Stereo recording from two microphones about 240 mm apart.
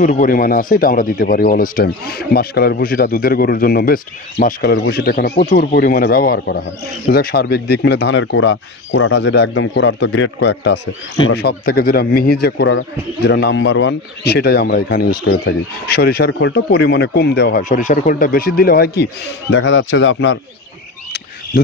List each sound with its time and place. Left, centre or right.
0.0 s speech: left
19.5 s speech: left